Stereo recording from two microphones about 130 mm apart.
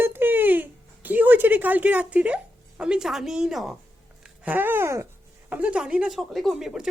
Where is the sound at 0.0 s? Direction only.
15° right (ahead or behind).